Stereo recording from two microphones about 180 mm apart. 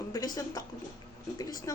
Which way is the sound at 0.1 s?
20° left (ahead or behind).